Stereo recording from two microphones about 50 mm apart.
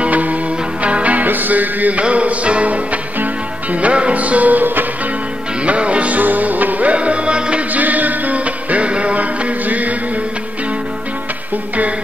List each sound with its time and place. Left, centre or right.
0.0 s music: right
5.6 s music: right
7.7 s music: right